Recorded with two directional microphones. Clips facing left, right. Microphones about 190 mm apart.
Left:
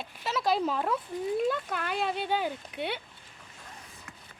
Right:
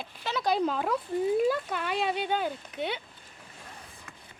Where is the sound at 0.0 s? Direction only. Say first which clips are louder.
Even; centre (ahead or behind).